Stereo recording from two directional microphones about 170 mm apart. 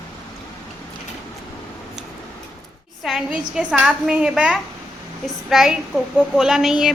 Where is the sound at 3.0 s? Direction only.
5° right (ahead or behind).